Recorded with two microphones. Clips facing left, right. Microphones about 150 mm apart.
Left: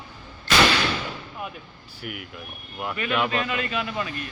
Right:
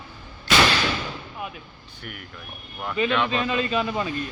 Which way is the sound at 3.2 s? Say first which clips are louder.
Right 2 dB; 25° right (ahead or behind).